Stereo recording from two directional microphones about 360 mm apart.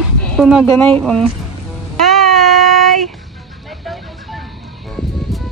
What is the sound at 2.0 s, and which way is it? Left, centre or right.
Child singing, centre.